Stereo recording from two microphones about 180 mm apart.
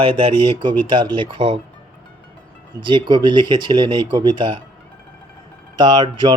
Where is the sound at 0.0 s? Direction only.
25° right (ahead or behind).